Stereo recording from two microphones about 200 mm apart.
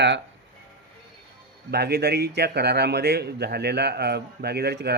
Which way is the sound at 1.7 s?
55° right (ahead or behind).